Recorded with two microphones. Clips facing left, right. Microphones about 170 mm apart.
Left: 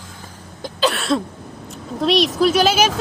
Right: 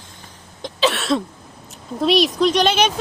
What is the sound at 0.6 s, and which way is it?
Cough, centre (ahead or behind).